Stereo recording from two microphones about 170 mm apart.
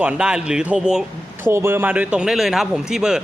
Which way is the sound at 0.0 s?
5° right (ahead or behind).